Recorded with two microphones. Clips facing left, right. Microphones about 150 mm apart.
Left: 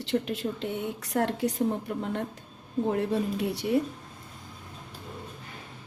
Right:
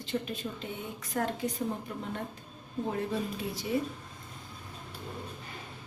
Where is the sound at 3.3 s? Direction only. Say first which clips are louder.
Left 6 dB; 70° left (ahead or behind).